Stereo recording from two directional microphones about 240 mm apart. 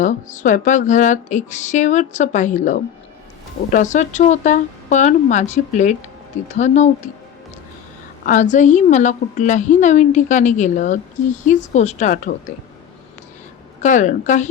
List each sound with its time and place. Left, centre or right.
0.0 s a woman's voice: left
8.2 s a woman's voice: left
13.8 s a woman's voice: left